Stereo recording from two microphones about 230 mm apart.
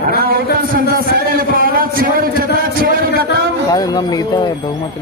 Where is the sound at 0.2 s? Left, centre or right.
Right.